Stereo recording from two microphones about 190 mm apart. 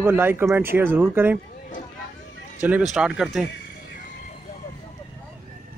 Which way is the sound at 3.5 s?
55° left (ahead or behind).